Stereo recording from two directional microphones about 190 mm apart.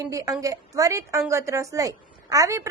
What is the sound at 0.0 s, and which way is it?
A woman's voice, 15° right (ahead or behind).